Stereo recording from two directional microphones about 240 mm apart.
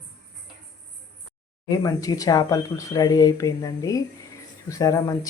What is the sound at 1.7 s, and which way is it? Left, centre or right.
Speech, centre.